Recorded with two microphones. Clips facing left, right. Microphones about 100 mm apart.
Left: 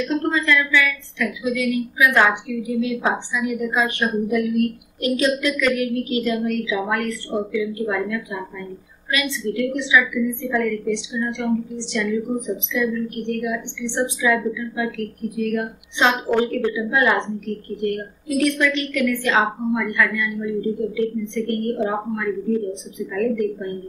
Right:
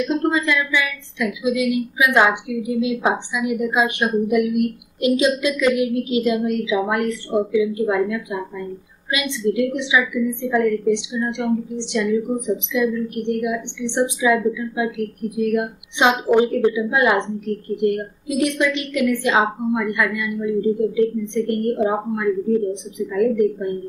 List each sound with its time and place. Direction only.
0.0 s a woman's voice: 15° right (ahead or behind)